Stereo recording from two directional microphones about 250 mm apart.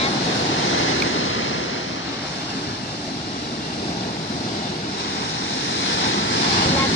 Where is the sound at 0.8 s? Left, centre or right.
Left.